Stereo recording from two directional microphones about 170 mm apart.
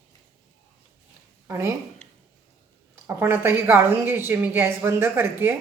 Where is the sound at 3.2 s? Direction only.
15° right (ahead or behind).